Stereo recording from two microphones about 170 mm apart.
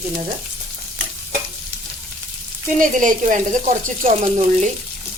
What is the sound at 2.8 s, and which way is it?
Sizzle, 50° right (ahead or behind).